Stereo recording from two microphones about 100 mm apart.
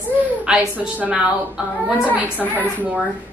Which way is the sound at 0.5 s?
15° right (ahead or behind).